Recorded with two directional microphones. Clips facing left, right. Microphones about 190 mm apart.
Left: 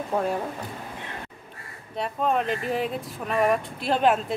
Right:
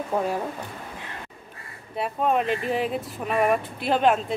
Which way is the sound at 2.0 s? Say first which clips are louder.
Right 1 dB; 5° right (ahead or behind).